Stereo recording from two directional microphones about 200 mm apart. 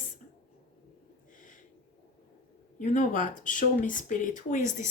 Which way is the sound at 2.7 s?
40° left (ahead or behind).